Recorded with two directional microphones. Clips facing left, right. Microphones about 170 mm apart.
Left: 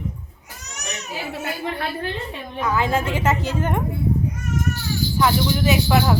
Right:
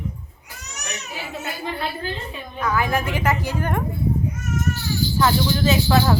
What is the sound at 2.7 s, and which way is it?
A woman's voice, 25° left (ahead or behind).